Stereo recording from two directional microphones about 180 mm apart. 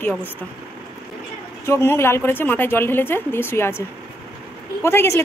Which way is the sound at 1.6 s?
15° left (ahead or behind).